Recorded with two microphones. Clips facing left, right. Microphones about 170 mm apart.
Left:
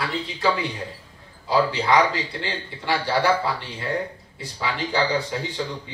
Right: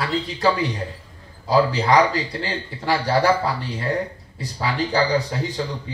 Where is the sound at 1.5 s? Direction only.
40° right (ahead or behind).